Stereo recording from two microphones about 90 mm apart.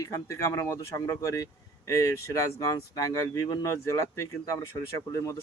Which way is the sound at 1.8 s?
35° left (ahead or behind).